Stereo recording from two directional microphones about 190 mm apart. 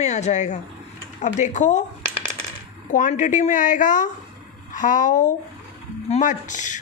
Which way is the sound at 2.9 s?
40° left (ahead or behind).